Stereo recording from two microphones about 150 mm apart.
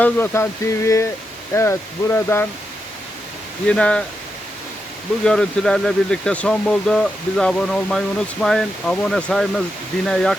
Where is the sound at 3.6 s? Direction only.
5° left (ahead or behind).